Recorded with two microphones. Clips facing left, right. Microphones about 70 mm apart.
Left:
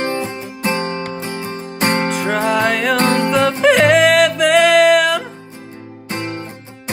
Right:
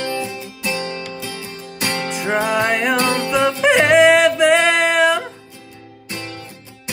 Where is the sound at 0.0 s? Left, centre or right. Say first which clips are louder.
Left 3 dB; left.